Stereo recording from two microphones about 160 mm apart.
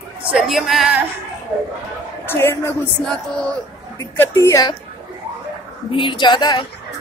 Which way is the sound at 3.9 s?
15° left (ahead or behind).